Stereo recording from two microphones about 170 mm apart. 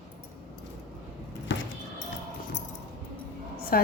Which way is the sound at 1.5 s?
90° left.